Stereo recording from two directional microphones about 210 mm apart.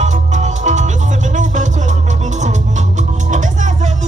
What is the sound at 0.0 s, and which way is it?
Music, 35° right (ahead or behind).